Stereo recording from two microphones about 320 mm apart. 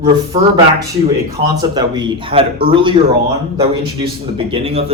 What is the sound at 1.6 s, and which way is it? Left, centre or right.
Speech, centre.